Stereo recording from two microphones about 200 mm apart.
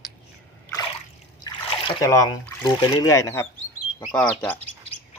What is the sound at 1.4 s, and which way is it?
Speech, 20° left (ahead or behind).